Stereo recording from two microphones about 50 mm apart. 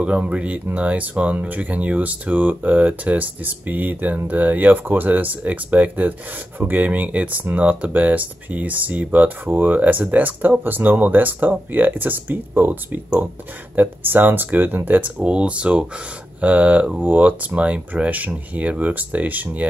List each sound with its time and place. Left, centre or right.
0.0 s speech: right
15.2 s speech: right